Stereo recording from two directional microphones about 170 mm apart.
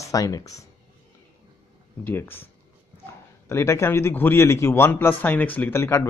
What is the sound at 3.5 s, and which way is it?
A man's voice, 15° left (ahead or behind).